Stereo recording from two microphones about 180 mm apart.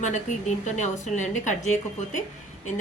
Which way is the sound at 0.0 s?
40° left (ahead or behind).